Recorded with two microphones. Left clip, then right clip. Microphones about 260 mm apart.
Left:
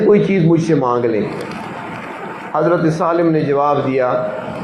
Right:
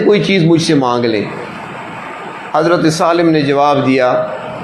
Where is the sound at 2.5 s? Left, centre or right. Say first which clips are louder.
Right 3 dB; right.